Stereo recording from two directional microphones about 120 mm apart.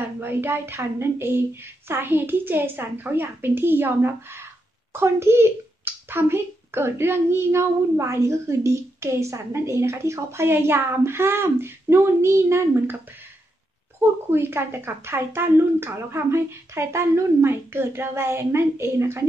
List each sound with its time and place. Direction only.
0.0 s a child's voice: 15° right (ahead or behind)
13.9 s a child's voice: 20° right (ahead or behind)